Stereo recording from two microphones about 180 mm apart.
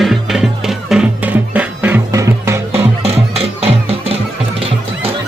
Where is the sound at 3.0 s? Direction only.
35° right (ahead or behind).